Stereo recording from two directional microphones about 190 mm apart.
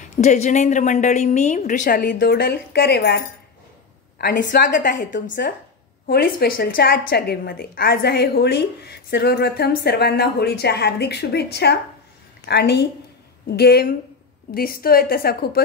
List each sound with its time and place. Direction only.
0.2 s a woman's voice: 40° left (ahead or behind); by 3.2 s 55° left (ahead or behind)
4.3 s a woman's voice: 45° left (ahead or behind)